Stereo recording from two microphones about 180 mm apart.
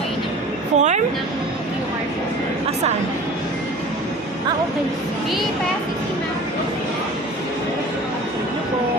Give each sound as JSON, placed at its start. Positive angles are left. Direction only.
{"t": 0.8, "sound": "speech", "side_deg": -40}